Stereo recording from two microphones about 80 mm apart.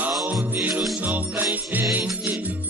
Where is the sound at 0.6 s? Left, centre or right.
Right.